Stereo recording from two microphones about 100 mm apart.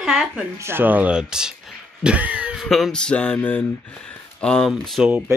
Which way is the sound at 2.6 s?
Centre (ahead or behind).